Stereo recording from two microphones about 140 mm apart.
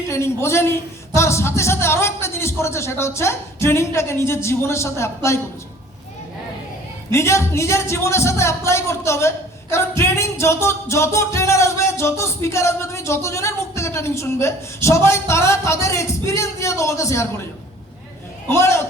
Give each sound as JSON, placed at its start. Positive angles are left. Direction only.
{"t": 0.1, "sound": "speech", "side_deg": 20}
{"t": 7.1, "sound": "speech", "side_deg": 20}
{"t": 18.4, "sound": "speech", "side_deg": 20}